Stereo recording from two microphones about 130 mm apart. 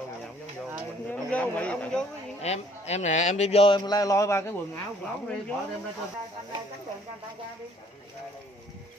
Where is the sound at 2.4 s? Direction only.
55° left (ahead or behind).